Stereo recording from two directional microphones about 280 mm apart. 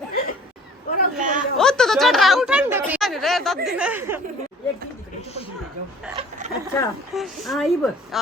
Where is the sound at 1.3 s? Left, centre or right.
Centre.